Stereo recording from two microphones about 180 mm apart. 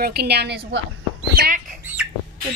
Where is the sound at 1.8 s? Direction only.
10° right (ahead or behind).